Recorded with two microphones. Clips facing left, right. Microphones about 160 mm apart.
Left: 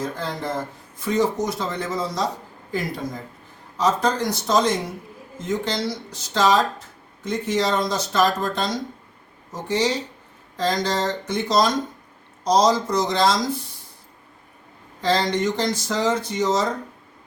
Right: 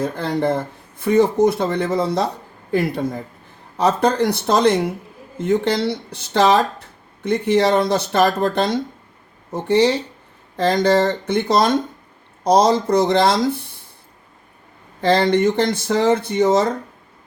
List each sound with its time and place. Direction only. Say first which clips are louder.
0.0 s speech: right 7 dB; 60° right (ahead or behind)
15.0 s speech: right 6 dB; 60° right (ahead or behind)